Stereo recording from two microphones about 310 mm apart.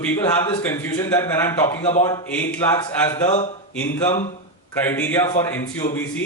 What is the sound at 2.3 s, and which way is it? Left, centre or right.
A man's voice, centre.